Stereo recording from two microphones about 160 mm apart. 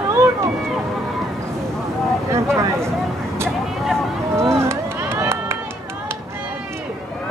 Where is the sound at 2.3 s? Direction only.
15° right (ahead or behind).